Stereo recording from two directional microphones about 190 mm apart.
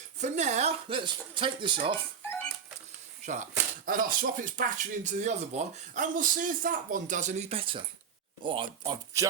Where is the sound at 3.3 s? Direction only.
40° right (ahead or behind).